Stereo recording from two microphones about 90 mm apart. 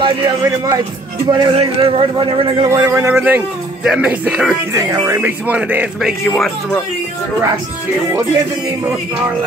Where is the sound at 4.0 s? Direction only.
15° right (ahead or behind).